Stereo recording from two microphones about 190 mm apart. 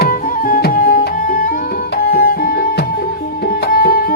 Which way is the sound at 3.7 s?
50° left (ahead or behind).